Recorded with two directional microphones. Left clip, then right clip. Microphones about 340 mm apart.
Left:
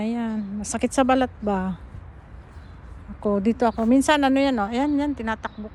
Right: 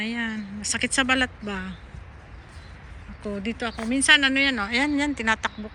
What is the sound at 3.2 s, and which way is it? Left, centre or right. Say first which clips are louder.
Speech: left 9 dB; centre.